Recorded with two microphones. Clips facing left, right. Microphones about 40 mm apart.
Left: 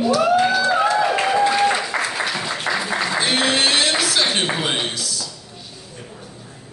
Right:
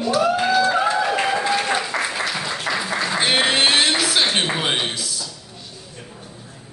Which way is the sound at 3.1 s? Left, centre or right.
Right.